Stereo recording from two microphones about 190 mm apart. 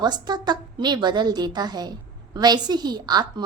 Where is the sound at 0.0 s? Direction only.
20° right (ahead or behind).